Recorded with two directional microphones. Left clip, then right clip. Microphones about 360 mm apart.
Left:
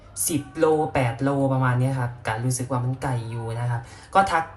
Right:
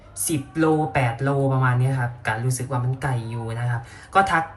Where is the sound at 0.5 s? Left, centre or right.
Centre.